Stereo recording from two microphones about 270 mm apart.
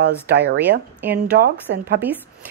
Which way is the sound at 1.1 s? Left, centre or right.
Right.